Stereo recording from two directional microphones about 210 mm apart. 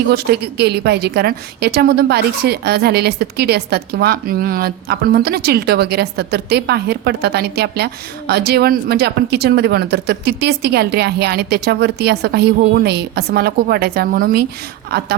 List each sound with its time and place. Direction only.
0.1 s a woman's voice: 50° right (ahead or behind)